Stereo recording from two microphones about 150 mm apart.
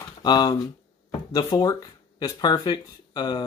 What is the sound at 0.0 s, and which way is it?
Speech, 30° left (ahead or behind).